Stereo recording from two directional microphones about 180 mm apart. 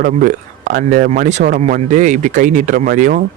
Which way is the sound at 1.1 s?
40° right (ahead or behind).